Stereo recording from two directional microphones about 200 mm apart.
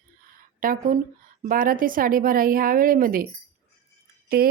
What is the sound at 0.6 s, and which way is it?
A woman's voice, 45° right (ahead or behind).